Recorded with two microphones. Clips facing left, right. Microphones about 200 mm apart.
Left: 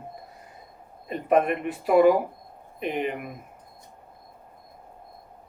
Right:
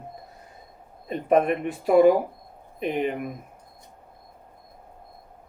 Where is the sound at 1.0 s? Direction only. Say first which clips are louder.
Right 1 dB; 40° right (ahead or behind).